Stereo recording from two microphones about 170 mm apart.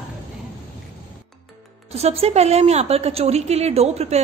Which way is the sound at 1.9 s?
40° right (ahead or behind).